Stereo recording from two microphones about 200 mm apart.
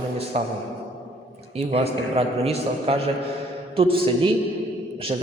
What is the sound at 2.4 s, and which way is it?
A man's voice, 30° right (ahead or behind).